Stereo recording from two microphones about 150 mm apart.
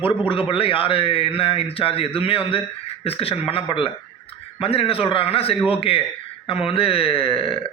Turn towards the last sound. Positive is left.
turn(degrees=40)  # may be behind; listen again after turning